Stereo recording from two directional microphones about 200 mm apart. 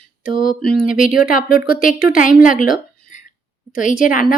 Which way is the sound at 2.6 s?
40° left (ahead or behind).